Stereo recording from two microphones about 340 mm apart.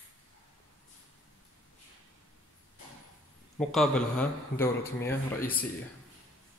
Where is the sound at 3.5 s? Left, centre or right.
Centre.